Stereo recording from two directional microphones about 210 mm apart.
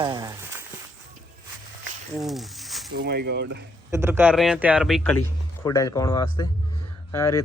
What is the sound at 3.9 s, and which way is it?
Speech, 10° right (ahead or behind).